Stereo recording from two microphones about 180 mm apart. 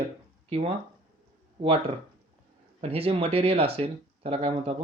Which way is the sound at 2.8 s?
35° right (ahead or behind).